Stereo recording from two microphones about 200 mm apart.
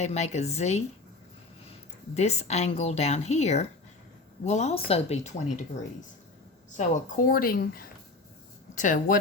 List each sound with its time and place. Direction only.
0.0 s speech: 35° left (ahead or behind)
2.1 s speech: 35° left (ahead or behind)
6.7 s a woman's voice: 40° left (ahead or behind)